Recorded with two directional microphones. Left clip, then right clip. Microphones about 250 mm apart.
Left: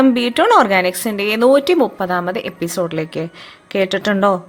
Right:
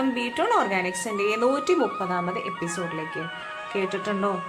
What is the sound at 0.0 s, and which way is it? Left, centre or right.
Speech, left.